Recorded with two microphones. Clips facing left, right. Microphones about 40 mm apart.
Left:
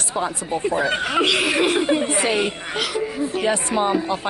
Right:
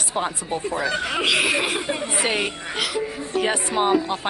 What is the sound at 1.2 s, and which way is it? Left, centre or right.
Speech, centre.